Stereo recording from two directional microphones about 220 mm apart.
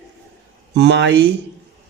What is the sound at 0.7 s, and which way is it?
Speech, 55° right (ahead or behind).